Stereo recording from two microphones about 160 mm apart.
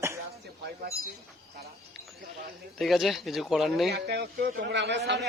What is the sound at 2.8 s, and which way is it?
Speech, centre (ahead or behind).